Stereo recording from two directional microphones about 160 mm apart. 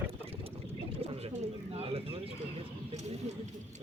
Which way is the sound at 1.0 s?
40° right (ahead or behind).